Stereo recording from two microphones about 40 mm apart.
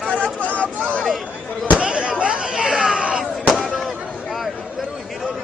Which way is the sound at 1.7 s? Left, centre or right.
Right.